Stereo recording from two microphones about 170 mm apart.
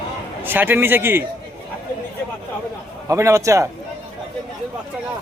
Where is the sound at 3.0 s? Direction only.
20° right (ahead or behind).